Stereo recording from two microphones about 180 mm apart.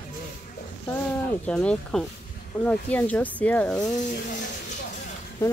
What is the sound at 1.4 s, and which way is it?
Speech, 5° left (ahead or behind).